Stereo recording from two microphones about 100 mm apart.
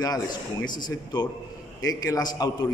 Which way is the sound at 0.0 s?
40° left (ahead or behind).